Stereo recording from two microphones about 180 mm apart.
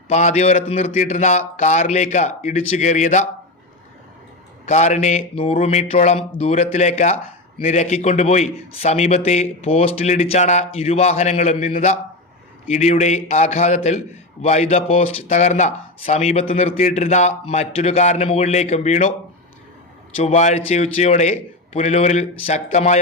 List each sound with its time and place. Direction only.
0.1 s speech: 40° left (ahead or behind)
4.6 s speech: 40° left (ahead or behind)
20.1 s speech: 40° left (ahead or behind)